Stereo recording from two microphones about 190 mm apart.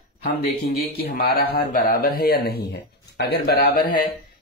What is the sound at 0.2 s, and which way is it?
Speech, 50° left (ahead or behind).